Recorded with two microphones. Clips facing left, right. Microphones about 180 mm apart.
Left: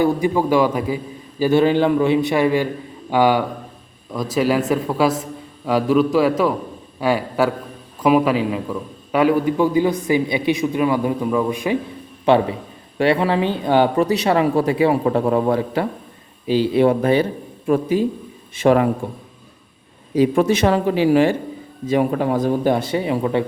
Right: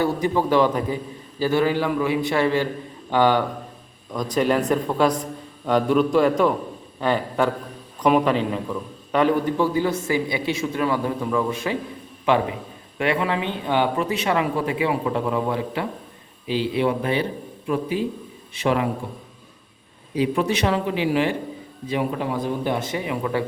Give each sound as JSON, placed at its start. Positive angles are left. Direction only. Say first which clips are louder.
{"t": 0.0, "sound": "a man's voice", "louder": "left 4 dB", "side_deg": 10}
{"t": 12.2, "sound": "speech", "louder": "left 5 dB", "side_deg": 30}
{"t": 20.1, "sound": "speech", "louder": "left 6 dB", "side_deg": 45}